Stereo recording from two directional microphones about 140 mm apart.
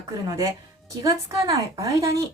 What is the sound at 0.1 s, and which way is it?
Speech, 25° right (ahead or behind).